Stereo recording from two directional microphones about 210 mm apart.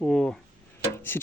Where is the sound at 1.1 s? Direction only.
10° left (ahead or behind).